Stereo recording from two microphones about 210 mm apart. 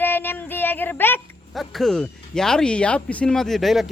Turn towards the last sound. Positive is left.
turn(degrees=0)  # may be behind; listen again after turning